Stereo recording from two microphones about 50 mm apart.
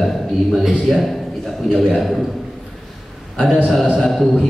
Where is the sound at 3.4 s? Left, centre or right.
Centre.